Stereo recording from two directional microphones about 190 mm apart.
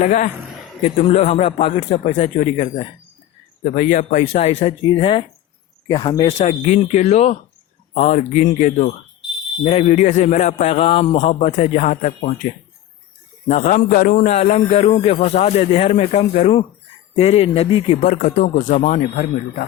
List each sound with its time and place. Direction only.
0.0 s a man's voice: 40° left (ahead or behind)
18.0 s speech: 45° left (ahead or behind)